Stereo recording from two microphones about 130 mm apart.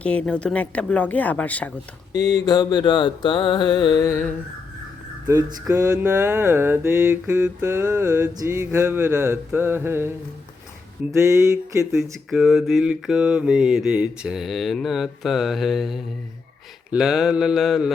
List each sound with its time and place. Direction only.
0.0 s speech: 10° left (ahead or behind)
2.1 s mantra: 30° left (ahead or behind)
4.0 s speech: 15° left (ahead or behind)
5.3 s mantra: 25° right (ahead or behind)
11.2 s mantra: 25° right (ahead or behind)
12.3 s mantra: centre (ahead or behind)